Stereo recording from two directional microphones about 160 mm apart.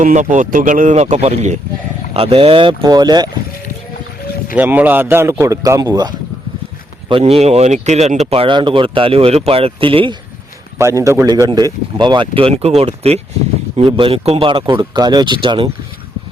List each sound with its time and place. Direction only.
0.0 s speech: 50° right (ahead or behind)
2.1 s speech: 35° right (ahead or behind)
4.5 s speech: 10° right (ahead or behind)
7.1 s speech: 35° right (ahead or behind)
10.8 s speech: 20° right (ahead or behind); by 15.7 s 35° right (ahead or behind)